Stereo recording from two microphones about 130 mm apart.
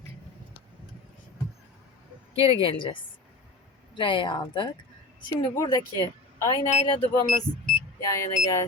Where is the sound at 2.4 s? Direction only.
45° left (ahead or behind); by 6.9 s 25° left (ahead or behind).